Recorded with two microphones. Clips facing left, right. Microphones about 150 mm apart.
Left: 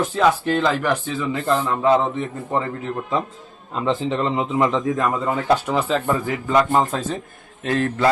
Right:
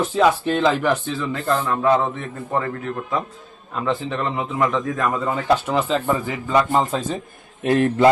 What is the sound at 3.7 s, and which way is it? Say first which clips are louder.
A man's voice: left 2 dB; 20° left (ahead or behind).